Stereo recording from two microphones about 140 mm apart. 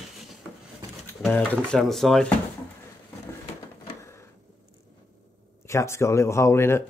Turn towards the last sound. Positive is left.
turn(degrees=20)  # may be behind; listen again after turning